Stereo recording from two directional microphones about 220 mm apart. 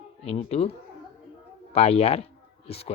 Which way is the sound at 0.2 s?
30° left (ahead or behind).